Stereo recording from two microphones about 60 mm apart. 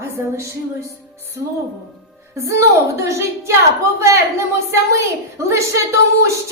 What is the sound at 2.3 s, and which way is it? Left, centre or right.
A woman's voice, right.